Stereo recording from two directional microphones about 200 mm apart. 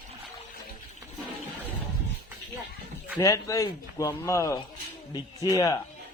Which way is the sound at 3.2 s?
15° left (ahead or behind).